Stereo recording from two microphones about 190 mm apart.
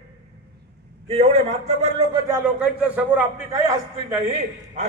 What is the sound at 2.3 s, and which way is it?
A man's voice, 10° right (ahead or behind).